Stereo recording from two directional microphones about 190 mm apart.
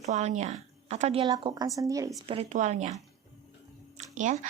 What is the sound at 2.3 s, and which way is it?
Speech, 35° right (ahead or behind).